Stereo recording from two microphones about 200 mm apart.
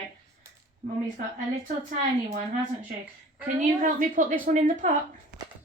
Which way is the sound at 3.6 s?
40° right (ahead or behind).